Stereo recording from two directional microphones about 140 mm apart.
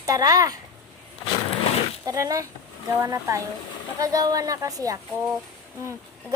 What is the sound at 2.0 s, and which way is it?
A woman's voice, 25° right (ahead or behind).